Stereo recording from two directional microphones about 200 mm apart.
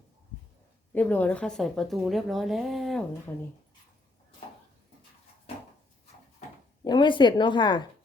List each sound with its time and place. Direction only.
0.9 s speech: 10° left (ahead or behind)
6.8 s a woman's voice: 20° left (ahead or behind)